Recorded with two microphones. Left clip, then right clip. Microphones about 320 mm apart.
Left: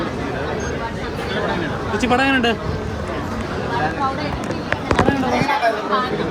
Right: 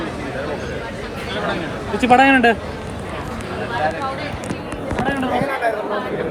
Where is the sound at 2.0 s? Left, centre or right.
Centre.